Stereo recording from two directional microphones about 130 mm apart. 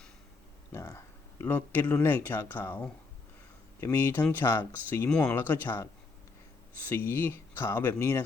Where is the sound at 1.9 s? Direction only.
20° left (ahead or behind).